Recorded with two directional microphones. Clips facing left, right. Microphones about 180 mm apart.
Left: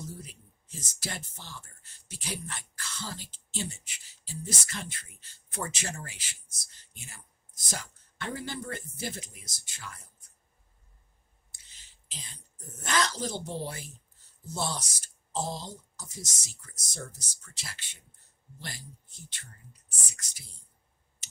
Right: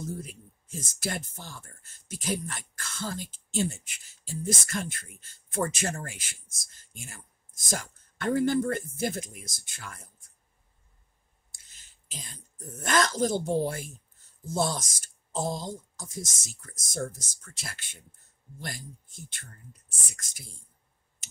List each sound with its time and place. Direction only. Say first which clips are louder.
0.0 s speech: right 6 dB; 50° right (ahead or behind)
11.5 s a sound: even; 45° right (ahead or behind)
12.8 s speech: right 5 dB; 50° right (ahead or behind)